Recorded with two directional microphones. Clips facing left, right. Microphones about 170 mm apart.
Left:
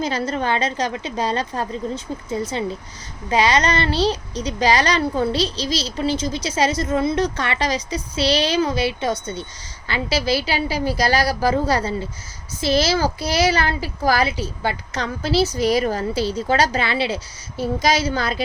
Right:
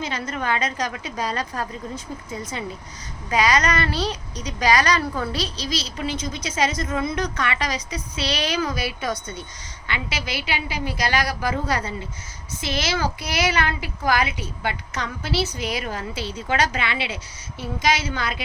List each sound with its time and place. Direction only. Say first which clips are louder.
0.0 s speech: left 5 dB; 35° left (ahead or behind)
3.2 s a woman's voice: left 2 dB; 25° left (ahead or behind)